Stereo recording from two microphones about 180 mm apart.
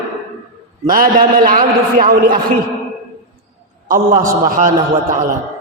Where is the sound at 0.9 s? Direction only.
50° right (ahead or behind).